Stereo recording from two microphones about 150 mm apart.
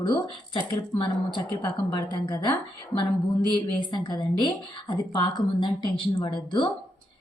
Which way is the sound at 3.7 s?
30° left (ahead or behind).